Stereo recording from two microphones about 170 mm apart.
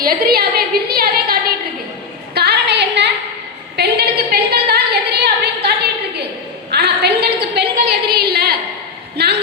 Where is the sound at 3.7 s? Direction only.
70° right (ahead or behind).